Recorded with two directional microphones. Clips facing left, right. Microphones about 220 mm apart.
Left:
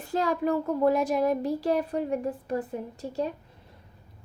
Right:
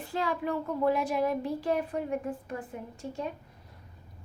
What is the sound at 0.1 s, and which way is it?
A child's voice, 40° left (ahead or behind).